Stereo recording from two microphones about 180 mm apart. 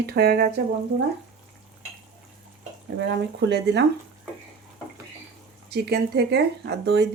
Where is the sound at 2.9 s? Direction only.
75° right (ahead or behind).